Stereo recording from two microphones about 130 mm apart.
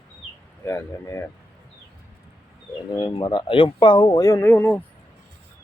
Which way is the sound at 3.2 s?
35° left (ahead or behind).